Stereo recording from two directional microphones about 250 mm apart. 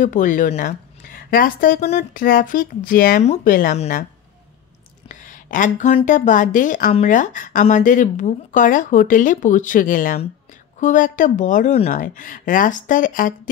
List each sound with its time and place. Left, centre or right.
0.0 s a woman's voice: left
5.0 s a woman's voice: left